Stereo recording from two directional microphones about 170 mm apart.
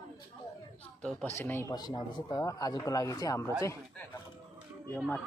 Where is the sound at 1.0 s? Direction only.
10° left (ahead or behind).